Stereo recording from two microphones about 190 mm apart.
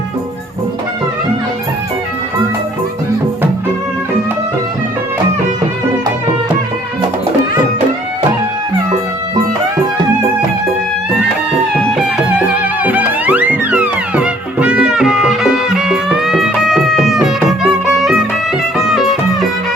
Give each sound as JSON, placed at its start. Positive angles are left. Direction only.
{"t": 12.8, "sound": "music", "side_deg": -10}